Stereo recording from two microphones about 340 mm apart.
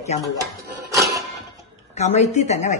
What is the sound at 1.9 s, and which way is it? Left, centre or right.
Speech, centre.